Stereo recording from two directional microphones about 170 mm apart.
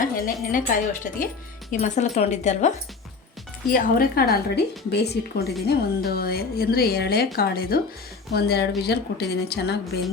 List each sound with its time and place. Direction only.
0.0 s a woman's voice: 55° left (ahead or behind)
1.8 s speech: 40° left (ahead or behind)
3.7 s a woman's voice: 55° left (ahead or behind); by 5.5 s 75° left (ahead or behind)
5.6 s a woman's voice: 65° left (ahead or behind)